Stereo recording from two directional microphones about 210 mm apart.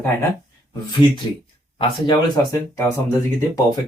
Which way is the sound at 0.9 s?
25° left (ahead or behind).